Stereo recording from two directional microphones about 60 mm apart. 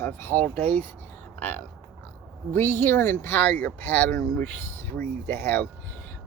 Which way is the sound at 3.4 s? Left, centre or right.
Left.